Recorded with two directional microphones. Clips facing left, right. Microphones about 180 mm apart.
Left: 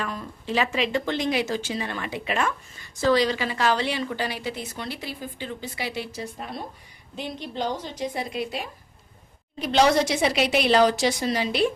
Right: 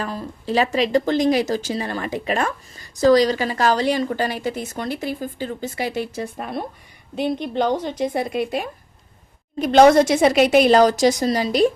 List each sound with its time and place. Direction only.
0.0 s a woman's voice: 35° right (ahead or behind)